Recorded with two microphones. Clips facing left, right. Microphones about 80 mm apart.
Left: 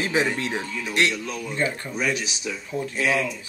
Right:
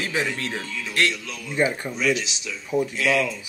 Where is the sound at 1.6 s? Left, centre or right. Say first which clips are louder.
Right 4 dB; centre.